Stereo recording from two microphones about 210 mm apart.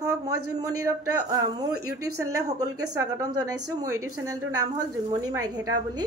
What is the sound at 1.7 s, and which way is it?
A woman's voice, 90° right.